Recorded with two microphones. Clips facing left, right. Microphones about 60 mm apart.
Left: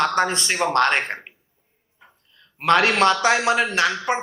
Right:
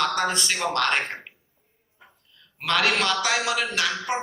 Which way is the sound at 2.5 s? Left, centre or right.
Left.